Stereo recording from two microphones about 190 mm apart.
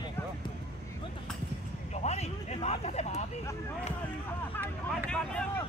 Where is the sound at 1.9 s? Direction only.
35° left (ahead or behind).